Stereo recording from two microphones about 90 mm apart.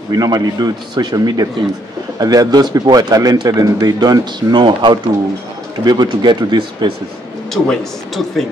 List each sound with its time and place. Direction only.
0.1 s speech: 50° right (ahead or behind)
7.5 s speech: 5° left (ahead or behind)